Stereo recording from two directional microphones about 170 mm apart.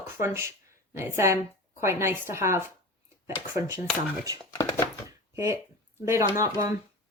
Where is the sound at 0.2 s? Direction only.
15° right (ahead or behind).